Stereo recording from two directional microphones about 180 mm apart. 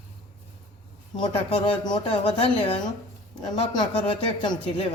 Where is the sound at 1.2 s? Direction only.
30° left (ahead or behind).